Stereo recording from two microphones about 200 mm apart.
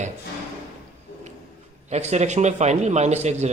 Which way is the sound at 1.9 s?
35° right (ahead or behind).